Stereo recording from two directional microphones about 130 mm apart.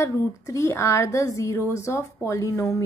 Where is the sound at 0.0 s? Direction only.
25° left (ahead or behind).